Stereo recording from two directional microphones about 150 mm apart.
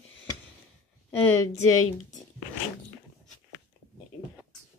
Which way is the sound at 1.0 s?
15° left (ahead or behind).